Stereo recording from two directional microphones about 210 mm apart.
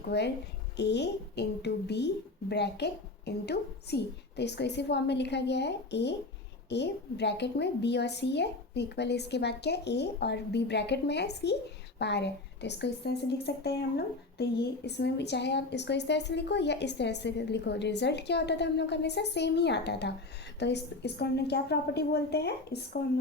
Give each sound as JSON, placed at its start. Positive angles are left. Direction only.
{"t": 0.1, "sound": "speech", "side_deg": 55}